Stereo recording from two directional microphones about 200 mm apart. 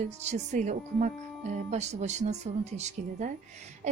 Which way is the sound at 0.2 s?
35° right (ahead or behind).